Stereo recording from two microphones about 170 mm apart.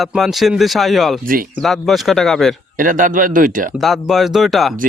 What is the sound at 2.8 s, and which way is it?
Speech, 50° right (ahead or behind).